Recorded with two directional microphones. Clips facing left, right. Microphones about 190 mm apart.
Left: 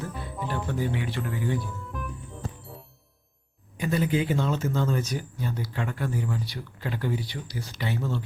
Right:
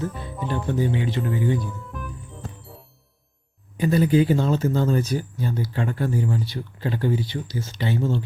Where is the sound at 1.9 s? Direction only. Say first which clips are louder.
Left 3 dB; centre (ahead or behind).